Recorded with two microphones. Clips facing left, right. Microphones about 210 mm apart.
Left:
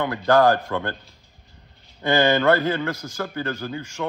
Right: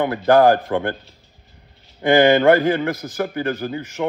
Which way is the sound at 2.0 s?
15° right (ahead or behind).